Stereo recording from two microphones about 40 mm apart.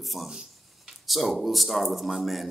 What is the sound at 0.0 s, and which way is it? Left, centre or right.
Speech, centre.